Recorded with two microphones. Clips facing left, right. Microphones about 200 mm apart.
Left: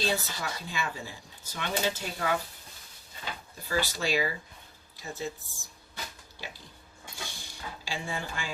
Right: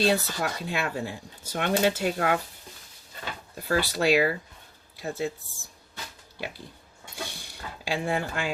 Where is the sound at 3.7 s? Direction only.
65° right (ahead or behind).